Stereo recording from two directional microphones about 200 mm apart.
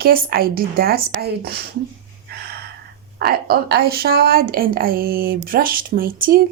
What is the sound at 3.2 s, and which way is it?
A woman's voice, 50° right (ahead or behind).